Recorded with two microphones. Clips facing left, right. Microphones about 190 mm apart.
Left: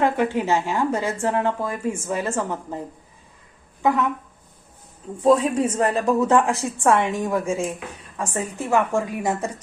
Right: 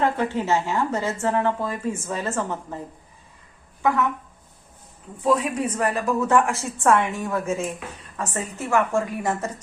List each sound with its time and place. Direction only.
0.0 s speech: 15° left (ahead or behind)
5.2 s speech: 30° left (ahead or behind); by 9.5 s 15° left (ahead or behind)